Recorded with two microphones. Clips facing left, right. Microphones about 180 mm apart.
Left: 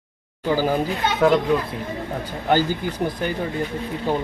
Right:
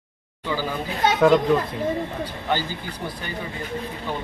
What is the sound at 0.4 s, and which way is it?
Speech, 45° left (ahead or behind).